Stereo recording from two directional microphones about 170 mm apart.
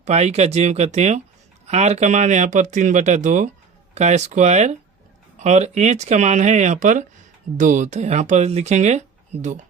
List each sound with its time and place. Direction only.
0.0 s speech: 40° right (ahead or behind)